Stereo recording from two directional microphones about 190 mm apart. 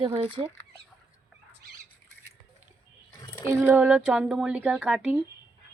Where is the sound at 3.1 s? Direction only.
15° left (ahead or behind).